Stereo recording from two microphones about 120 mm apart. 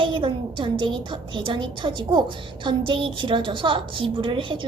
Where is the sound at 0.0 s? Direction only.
45° right (ahead or behind).